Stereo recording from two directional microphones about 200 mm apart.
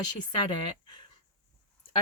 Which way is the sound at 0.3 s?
20° left (ahead or behind).